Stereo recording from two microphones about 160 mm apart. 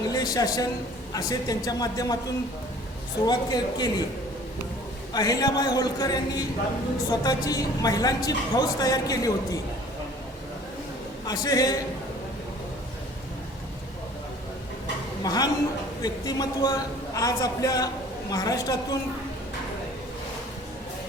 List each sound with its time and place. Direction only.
0.1 s a man's voice: 25° left (ahead or behind)
3.2 s a woman's voice: 25° left (ahead or behind)
5.1 s a woman's voice: 25° left (ahead or behind)
11.3 s a woman's voice: 25° left (ahead or behind)
15.2 s a woman's voice: 25° left (ahead or behind)